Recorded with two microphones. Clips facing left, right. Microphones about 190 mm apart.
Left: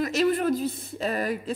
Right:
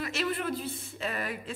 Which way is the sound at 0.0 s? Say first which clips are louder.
Left 9 dB; 40° left (ahead or behind).